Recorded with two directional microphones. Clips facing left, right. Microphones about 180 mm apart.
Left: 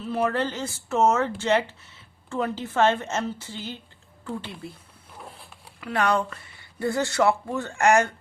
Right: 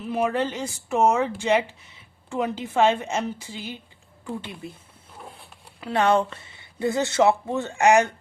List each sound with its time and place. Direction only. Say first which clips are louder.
0.0 s speech: right 1 dB; 15° right (ahead or behind)
5.8 s speech: right 3 dB; 25° right (ahead or behind)